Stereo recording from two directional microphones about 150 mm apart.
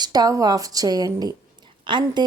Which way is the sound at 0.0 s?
25° right (ahead or behind).